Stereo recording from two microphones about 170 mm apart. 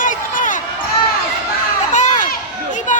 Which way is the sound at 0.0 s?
50° left (ahead or behind).